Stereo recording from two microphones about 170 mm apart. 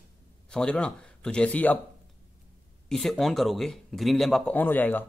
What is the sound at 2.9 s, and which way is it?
Speech, centre (ahead or behind).